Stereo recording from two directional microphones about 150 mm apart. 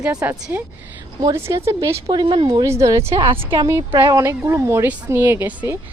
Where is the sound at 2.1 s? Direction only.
30° right (ahead or behind).